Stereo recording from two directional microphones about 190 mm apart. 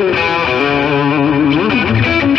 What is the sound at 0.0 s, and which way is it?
Music, centre (ahead or behind).